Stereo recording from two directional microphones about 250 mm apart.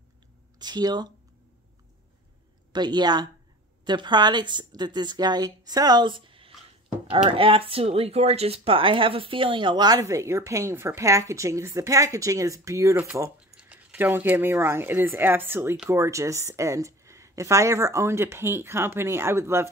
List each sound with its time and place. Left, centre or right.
0.6 s speech: centre
2.7 s speech: centre